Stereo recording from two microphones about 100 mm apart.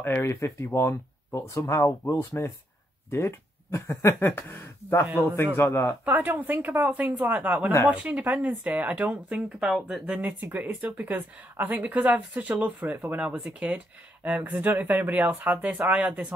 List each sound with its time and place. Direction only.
0.0 s speech: 25° left (ahead or behind)
6.0 s speech: 15° right (ahead or behind)